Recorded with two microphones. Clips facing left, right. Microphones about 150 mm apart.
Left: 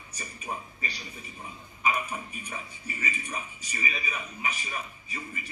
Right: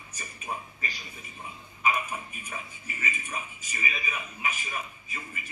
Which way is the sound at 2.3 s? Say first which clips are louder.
Left 1 dB; 35° left (ahead or behind).